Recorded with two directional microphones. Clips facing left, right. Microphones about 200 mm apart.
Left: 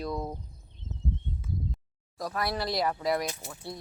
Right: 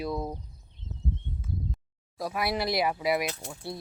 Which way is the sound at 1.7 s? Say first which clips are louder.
Right 1 dB; 10° right (ahead or behind).